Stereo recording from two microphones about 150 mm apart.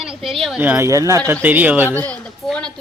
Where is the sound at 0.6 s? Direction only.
15° right (ahead or behind).